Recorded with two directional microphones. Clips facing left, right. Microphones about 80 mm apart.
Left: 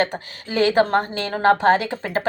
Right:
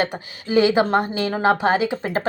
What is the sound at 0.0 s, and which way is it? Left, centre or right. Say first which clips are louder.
A woman's voice: left 1 dB; centre.